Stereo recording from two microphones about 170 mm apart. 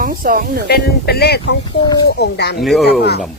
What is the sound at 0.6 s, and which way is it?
Speech, 70° left (ahead or behind).